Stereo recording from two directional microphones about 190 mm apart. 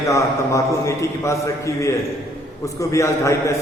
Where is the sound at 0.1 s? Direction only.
15° left (ahead or behind).